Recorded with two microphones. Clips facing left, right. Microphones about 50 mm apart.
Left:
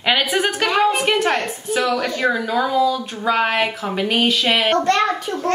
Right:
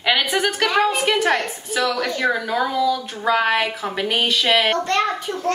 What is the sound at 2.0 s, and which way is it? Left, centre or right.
Speech, left.